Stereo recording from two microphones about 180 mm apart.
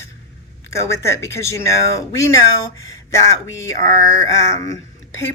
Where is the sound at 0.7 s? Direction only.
15° left (ahead or behind).